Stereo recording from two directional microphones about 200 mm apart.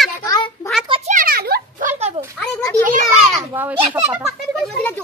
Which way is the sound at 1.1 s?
45° right (ahead or behind).